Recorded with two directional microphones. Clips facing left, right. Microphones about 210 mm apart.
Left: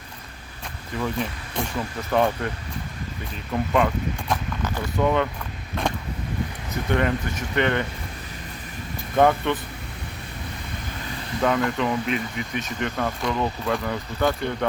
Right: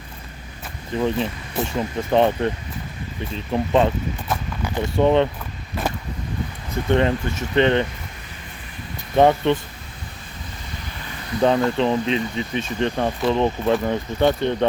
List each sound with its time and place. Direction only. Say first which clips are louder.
0.9 s speech: right 5 dB; 25° right (ahead or behind)
3.5 s speech: right 3 dB; 25° right (ahead or behind)
4.3 s speech: even; 5° right (ahead or behind)
4.7 s speech: right 5 dB; 25° right (ahead or behind)
5.7 s vehicle: right 1 dB; 5° right (ahead or behind)
6.9 s speech: right 4 dB; 25° right (ahead or behind)
9.1 s speech: right 3 dB; 20° right (ahead or behind)
11.3 s speech: right 4 dB; 25° right (ahead or behind)